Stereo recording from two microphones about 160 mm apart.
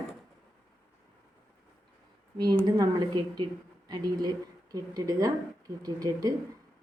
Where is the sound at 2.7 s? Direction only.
25° right (ahead or behind).